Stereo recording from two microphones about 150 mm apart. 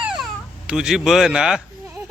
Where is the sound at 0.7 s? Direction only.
5° right (ahead or behind).